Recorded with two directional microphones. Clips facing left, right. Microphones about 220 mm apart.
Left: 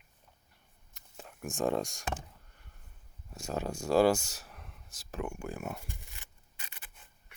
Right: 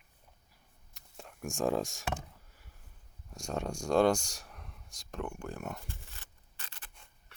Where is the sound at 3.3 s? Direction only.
5° left (ahead or behind).